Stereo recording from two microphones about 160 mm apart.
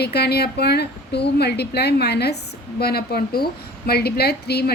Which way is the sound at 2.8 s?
80° left.